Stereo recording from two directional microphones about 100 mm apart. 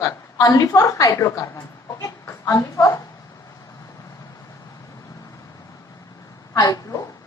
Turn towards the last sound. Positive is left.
turn(degrees=35)  # may be behind; listen again after turning